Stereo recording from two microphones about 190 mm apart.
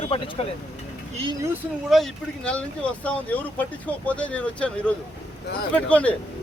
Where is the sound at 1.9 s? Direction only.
Centre (ahead or behind).